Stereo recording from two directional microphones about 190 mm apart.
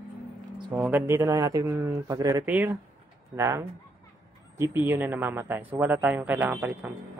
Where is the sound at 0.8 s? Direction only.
10° right (ahead or behind).